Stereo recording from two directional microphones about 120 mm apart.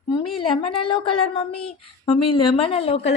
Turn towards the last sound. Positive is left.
turn(degrees=55)  # may be behind; listen again after turning